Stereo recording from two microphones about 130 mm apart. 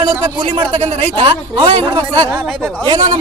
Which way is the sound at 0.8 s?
55° right (ahead or behind).